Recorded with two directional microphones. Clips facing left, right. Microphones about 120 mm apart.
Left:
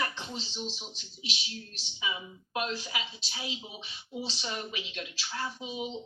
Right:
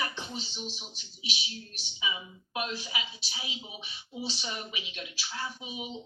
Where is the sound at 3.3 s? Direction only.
10° right (ahead or behind).